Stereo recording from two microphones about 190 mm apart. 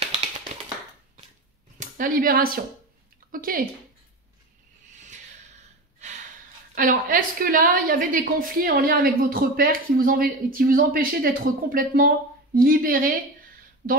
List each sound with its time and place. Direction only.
1.8 s speech: 45° right (ahead or behind)
5.9 s gasp: 40° right (ahead or behind)
6.7 s a woman's voice: 45° right (ahead or behind)